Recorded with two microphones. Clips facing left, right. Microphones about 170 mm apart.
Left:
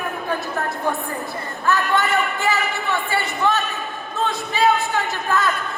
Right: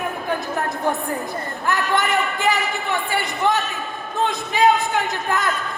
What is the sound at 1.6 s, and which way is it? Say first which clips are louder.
A man's voice: left 2 dB; 15° right (ahead or behind).